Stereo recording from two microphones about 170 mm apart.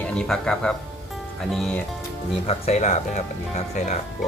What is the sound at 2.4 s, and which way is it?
Speech, 40° left (ahead or behind).